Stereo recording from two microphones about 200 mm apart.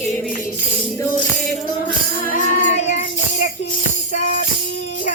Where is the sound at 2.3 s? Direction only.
40° left (ahead or behind).